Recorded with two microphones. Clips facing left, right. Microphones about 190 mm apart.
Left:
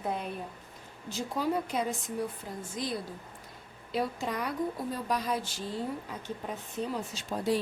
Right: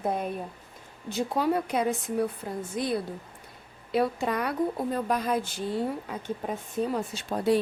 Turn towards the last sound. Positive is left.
turn(degrees=-60)  # may be behind; listen again after turning